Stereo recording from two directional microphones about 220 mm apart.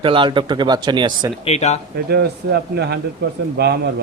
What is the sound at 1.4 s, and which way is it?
Speech, 30° left (ahead or behind).